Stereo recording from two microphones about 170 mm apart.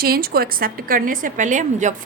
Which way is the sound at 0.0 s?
65° right (ahead or behind).